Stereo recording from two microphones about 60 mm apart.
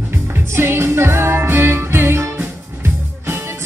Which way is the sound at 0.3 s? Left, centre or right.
Right.